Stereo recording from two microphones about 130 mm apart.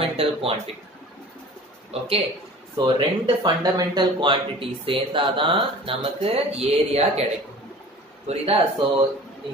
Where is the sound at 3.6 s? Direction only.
30° right (ahead or behind); by 8.6 s 50° right (ahead or behind).